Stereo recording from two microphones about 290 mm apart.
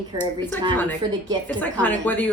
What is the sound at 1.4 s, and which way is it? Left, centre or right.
Speech, centre.